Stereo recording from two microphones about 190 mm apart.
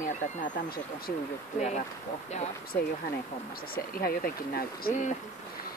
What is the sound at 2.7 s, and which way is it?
Speech, 10° left (ahead or behind).